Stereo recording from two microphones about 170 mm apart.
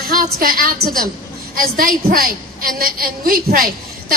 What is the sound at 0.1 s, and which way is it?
Speech, 55° right (ahead or behind).